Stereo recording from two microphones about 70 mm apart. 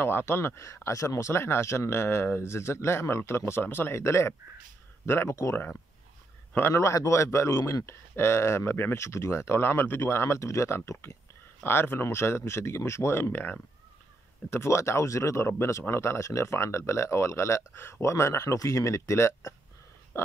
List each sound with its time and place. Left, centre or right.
0.0 s speech: left
6.7 s speech: left
14.5 s speech: left